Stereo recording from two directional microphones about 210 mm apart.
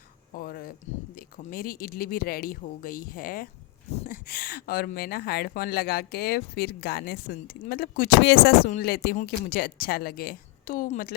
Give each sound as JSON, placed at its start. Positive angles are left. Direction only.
{"t": 0.3, "sound": "speech", "side_deg": 45}